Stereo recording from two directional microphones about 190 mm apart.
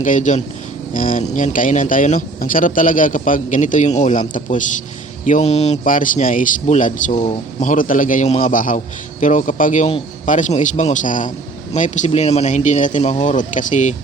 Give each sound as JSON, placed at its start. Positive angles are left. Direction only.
{"t": 0.0, "sound": "a man's voice", "side_deg": 40}